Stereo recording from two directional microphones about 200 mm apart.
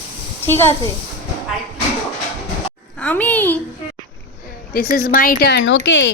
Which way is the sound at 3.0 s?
5° left (ahead or behind).